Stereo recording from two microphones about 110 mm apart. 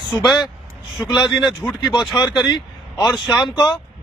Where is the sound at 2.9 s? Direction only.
Centre (ahead or behind).